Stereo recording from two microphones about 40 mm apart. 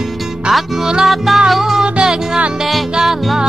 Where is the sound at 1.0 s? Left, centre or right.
Centre.